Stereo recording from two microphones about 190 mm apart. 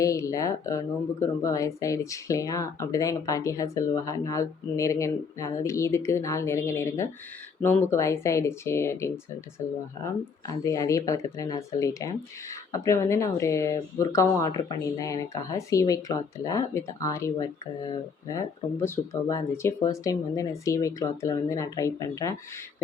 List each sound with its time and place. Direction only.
0.0 s speech: 15° left (ahead or behind)